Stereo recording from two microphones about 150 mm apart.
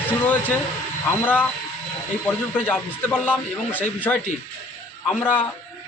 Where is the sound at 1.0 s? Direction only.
10° left (ahead or behind).